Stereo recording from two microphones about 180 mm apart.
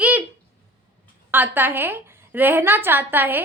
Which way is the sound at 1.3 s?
10° right (ahead or behind).